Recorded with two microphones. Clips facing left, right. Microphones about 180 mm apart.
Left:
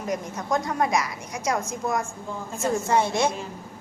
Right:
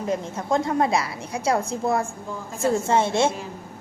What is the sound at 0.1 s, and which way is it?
A woman's voice, 25° right (ahead or behind).